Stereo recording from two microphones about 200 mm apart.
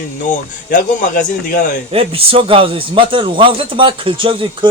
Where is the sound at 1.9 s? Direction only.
30° right (ahead or behind).